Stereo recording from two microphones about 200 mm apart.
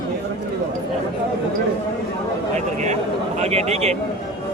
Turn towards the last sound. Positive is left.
turn(degrees=-30)  # may be behind; listen again after turning